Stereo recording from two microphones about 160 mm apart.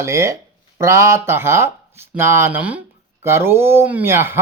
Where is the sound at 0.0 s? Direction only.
20° right (ahead or behind).